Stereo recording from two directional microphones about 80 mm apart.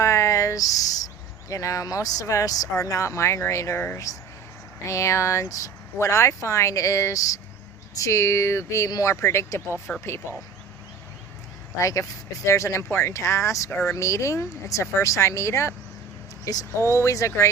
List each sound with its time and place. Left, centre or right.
0.0 s speech: left
11.8 s speech: left